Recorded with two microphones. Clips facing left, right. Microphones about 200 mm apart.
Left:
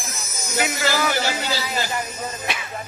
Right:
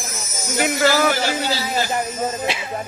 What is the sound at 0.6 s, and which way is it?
Music, 50° right (ahead or behind).